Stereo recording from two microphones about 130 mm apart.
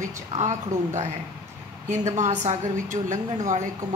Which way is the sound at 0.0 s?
65° right (ahead or behind).